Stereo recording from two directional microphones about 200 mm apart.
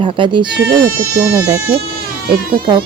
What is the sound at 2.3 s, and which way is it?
Speech, 25° right (ahead or behind).